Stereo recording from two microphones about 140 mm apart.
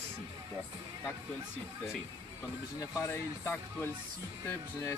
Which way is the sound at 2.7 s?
20° left (ahead or behind).